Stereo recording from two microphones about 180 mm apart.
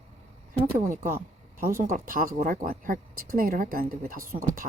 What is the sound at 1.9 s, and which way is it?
Speech, 50° right (ahead or behind).